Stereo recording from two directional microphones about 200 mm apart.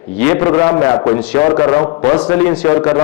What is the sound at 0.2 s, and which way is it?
A man's voice, 10° left (ahead or behind).